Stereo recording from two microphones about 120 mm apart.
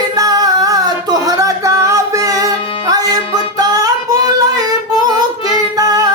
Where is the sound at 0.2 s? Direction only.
30° right (ahead or behind).